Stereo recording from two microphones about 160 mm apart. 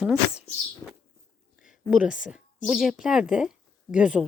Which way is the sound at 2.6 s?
5° right (ahead or behind).